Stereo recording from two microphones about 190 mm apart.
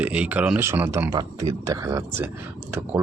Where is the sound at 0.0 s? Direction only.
5° right (ahead or behind).